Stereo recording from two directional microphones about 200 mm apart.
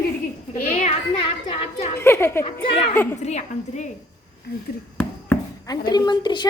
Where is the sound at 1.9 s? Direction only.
10° left (ahead or behind).